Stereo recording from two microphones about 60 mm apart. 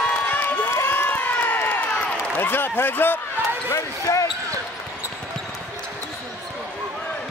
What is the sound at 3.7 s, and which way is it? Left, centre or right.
Speech, left.